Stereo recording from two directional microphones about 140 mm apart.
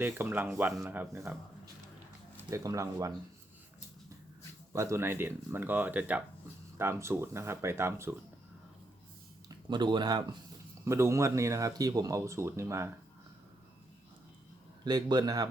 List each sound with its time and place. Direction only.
0.0 s speech: 15° right (ahead or behind)
2.5 s speech: 20° right (ahead or behind)
4.7 s speech: 20° right (ahead or behind)
9.6 s speech: 35° right (ahead or behind)
10.8 s speech: 20° right (ahead or behind)
14.8 s speech: 30° right (ahead or behind)